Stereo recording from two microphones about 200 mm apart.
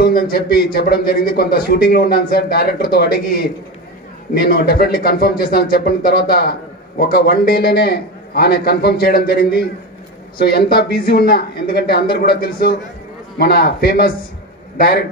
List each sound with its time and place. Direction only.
0.0 s speech: 50° left (ahead or behind)